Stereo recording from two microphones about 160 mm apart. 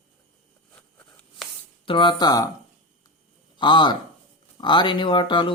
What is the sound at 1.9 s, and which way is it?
Speech, 30° left (ahead or behind).